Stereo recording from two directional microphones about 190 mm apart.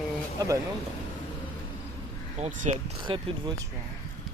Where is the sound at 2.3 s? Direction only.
35° right (ahead or behind).